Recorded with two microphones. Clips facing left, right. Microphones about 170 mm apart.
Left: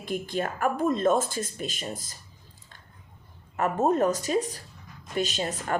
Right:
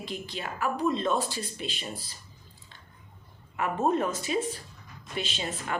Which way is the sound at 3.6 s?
40° left (ahead or behind).